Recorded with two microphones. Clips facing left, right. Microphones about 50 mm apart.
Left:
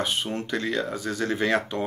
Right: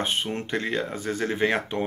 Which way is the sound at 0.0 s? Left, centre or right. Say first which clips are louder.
Even; right.